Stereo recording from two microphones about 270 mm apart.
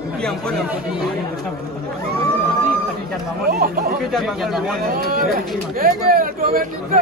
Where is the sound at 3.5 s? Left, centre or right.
Right.